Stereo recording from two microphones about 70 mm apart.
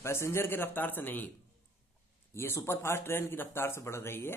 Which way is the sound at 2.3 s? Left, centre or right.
Left.